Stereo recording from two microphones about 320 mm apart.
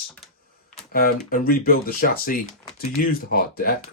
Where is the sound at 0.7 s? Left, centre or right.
Left.